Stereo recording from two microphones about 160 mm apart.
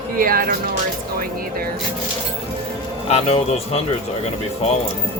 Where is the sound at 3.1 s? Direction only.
40° left (ahead or behind).